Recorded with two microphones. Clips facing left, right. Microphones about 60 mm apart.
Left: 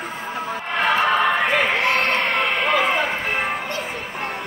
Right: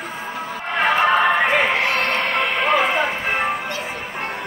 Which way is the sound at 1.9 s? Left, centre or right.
Right.